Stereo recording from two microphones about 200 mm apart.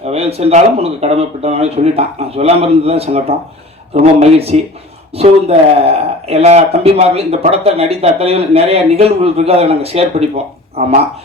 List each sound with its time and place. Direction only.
0.0 s speech: 30° right (ahead or behind)